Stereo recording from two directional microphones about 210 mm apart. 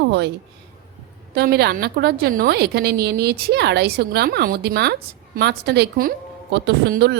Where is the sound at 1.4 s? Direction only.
50° right (ahead or behind).